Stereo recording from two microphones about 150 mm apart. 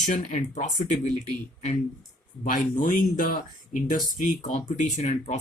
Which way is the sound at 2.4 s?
60° left (ahead or behind).